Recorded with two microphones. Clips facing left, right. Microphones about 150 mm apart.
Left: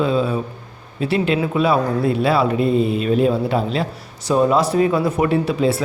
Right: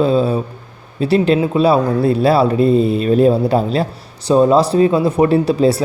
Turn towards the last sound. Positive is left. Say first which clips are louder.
# right 5 dB
turn(degrees=-35)  # may be behind; listen again after turning